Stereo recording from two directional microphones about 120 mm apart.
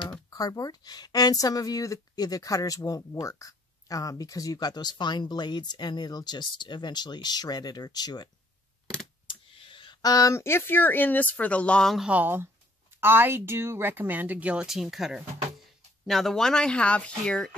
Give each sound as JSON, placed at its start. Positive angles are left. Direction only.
{"t": 0.3, "sound": "speech", "side_deg": 30}
{"t": 9.3, "sound": "speech", "side_deg": 45}
{"t": 12.1, "sound": "a woman's voice", "side_deg": -15}